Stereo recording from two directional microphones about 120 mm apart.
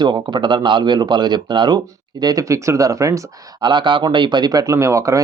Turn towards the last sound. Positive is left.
turn(degrees=-25)  # may be behind; listen again after turning